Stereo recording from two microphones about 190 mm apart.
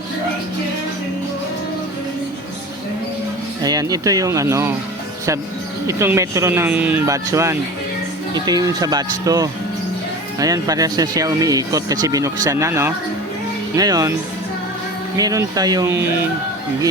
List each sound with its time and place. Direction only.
3.6 s speech: 20° right (ahead or behind)
5.8 s speech: 15° right (ahead or behind)
15.1 s speech: 20° right (ahead or behind)